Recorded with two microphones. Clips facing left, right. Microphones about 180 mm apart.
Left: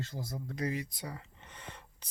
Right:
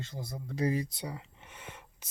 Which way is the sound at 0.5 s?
35° right (ahead or behind).